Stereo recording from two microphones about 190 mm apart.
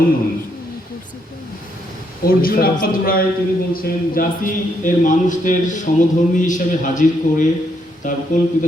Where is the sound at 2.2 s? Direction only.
50° left (ahead or behind).